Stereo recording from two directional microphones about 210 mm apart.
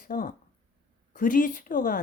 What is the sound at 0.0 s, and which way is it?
Speech, 40° left (ahead or behind).